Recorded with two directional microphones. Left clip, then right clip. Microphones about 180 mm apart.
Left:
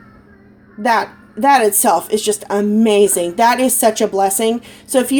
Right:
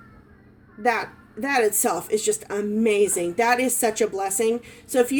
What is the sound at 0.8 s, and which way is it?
A woman's voice, 20° left (ahead or behind).